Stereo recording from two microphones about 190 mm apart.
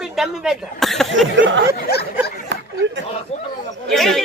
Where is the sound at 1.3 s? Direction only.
75° right (ahead or behind).